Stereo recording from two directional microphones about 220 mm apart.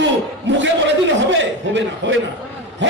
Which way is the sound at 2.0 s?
55° right (ahead or behind).